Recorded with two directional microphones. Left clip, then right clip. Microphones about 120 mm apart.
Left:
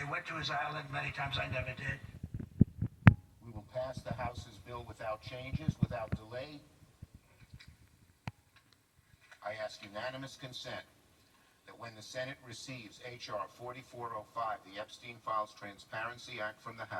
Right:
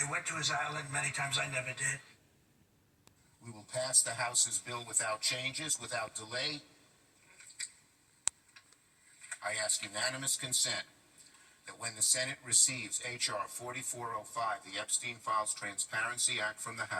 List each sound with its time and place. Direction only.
0.0 s speech: 15° right (ahead or behind)
3.7 s speech: 15° right (ahead or behind)
9.4 s speech: 15° right (ahead or behind)